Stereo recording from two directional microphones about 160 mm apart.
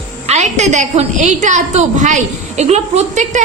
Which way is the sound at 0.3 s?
45° right (ahead or behind).